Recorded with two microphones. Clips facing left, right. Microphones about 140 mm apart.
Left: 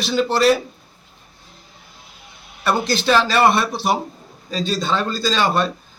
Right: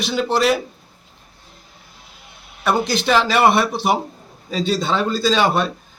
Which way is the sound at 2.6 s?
15° right (ahead or behind).